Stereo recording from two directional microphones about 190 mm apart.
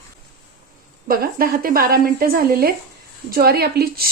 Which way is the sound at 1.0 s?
50° right (ahead or behind).